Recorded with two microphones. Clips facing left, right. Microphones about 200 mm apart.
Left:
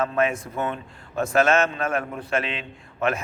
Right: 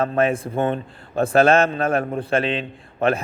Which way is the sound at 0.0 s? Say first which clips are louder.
Right 3 dB; 35° right (ahead or behind).